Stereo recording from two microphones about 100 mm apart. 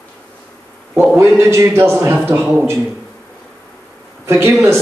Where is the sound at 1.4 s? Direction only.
25° right (ahead or behind).